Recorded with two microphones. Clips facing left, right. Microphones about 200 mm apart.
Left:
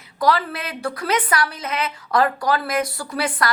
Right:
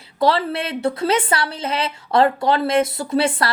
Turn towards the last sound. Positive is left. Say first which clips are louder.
# right 5 dB
turn(degrees=-25)  # may be behind; listen again after turning